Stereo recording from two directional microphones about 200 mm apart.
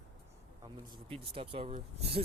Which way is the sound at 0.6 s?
25° right (ahead or behind).